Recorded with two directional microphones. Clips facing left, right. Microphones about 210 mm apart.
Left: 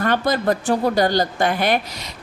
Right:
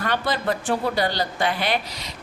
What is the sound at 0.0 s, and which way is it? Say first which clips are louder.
A woman's voice: left 5 dB; 45° left (ahead or behind).